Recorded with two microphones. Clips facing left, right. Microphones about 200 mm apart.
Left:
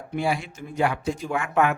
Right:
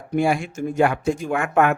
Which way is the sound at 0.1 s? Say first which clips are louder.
Right 6 dB; 50° right (ahead or behind).